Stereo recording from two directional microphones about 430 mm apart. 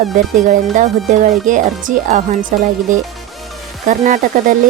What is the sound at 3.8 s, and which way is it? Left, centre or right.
Speech, centre.